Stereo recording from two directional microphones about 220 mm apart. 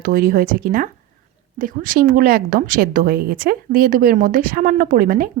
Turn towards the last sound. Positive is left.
turn(degrees=-40)  # may be behind; listen again after turning